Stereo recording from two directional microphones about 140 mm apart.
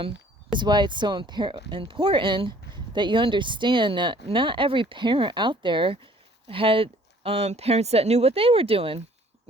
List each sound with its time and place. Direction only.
0.5 s speech: 30° right (ahead or behind)